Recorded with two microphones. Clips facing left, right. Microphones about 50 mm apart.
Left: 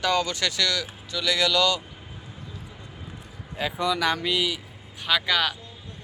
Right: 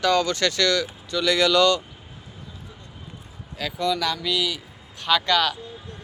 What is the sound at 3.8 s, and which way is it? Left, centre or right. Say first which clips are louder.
Speech: even; centre.